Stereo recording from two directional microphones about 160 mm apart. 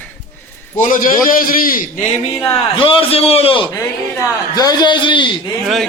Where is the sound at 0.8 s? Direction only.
55° left (ahead or behind).